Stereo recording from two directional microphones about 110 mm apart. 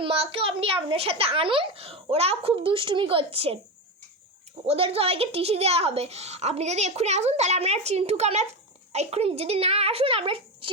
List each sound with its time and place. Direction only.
0.0 s a child's voice: 60° right (ahead or behind)
4.6 s a woman's voice: 65° right (ahead or behind)